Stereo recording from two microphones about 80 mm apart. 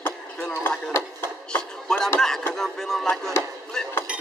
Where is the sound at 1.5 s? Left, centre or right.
Centre.